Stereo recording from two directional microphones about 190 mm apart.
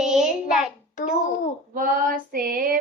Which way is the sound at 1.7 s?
45° right (ahead or behind).